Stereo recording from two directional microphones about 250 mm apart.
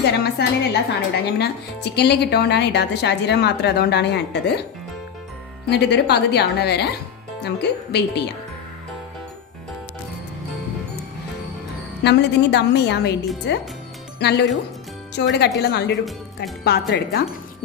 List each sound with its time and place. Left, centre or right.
0.0 s speech: left
5.7 s speech: left
12.0 s a woman's voice: left
14.2 s a woman's voice: left